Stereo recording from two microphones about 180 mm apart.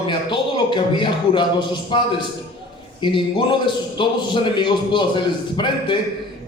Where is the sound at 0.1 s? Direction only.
25° left (ahead or behind).